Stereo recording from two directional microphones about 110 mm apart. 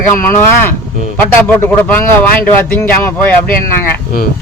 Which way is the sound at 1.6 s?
15° left (ahead or behind).